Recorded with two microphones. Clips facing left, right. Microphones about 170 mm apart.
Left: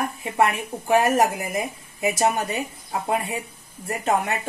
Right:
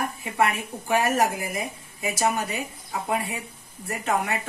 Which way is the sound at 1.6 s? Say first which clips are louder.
Left 5 dB; 25° left (ahead or behind).